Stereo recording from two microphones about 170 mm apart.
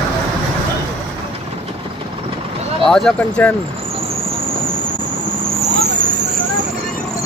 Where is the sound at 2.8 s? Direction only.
5° left (ahead or behind).